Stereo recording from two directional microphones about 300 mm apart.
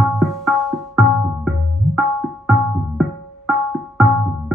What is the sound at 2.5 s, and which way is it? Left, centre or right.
Music, centre.